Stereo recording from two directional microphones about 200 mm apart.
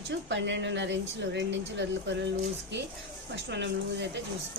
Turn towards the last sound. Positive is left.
turn(degrees=-60)  # may be behind; listen again after turning